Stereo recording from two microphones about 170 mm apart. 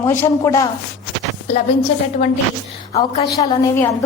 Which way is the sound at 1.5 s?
40° left (ahead or behind).